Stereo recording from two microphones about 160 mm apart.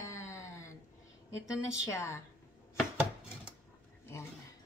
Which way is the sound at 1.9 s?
20° left (ahead or behind).